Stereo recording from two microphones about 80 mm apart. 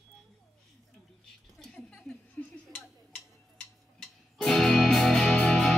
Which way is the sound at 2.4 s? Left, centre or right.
Left.